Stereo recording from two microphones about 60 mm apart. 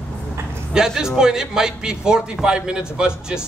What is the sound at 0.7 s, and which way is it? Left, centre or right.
A man's voice, centre.